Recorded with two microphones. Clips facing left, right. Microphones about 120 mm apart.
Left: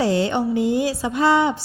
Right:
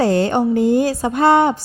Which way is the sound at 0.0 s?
50° right (ahead or behind).